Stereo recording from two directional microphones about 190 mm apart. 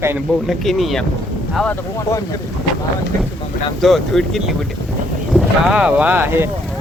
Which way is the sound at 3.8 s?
Centre (ahead or behind).